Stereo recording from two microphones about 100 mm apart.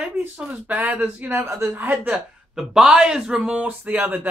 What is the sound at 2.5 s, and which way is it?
Speech, 5° right (ahead or behind).